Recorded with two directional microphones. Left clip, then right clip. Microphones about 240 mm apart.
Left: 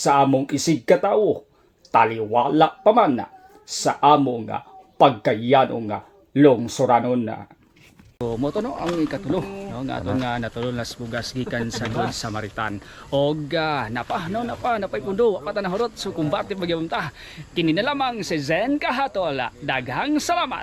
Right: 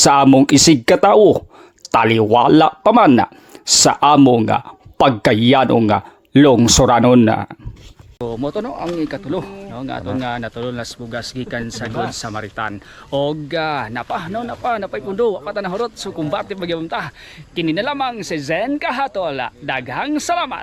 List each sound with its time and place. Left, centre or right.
0.0 s speech: right
8.2 s speech: centre